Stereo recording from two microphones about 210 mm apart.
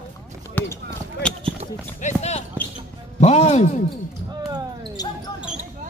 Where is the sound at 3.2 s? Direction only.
30° left (ahead or behind).